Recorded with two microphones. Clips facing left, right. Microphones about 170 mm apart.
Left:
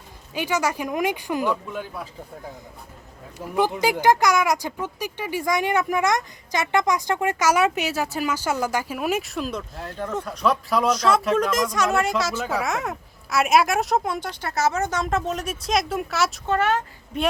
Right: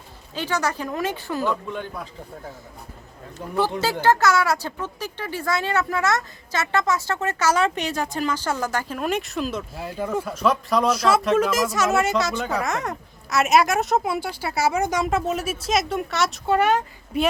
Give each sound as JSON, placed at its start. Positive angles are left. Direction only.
{"t": 0.3, "sound": "speech", "side_deg": 10}
{"t": 3.3, "sound": "speech", "side_deg": 10}
{"t": 16.5, "sound": "speech", "side_deg": -15}